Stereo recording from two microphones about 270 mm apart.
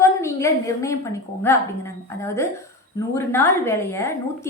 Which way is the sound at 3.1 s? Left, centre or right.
Centre.